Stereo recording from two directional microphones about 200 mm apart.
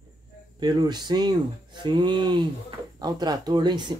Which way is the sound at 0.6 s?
20° right (ahead or behind).